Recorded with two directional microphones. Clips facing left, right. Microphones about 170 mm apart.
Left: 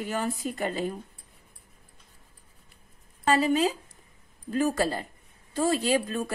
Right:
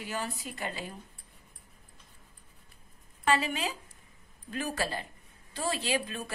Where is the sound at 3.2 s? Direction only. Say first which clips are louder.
Left 6 dB; 40° left (ahead or behind).